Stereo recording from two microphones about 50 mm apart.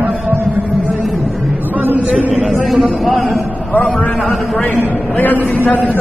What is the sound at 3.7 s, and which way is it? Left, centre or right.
A man's voice, left.